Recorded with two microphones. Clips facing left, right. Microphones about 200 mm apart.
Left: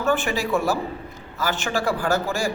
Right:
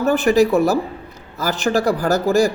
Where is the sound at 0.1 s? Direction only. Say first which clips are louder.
Right 8 dB; 40° right (ahead or behind).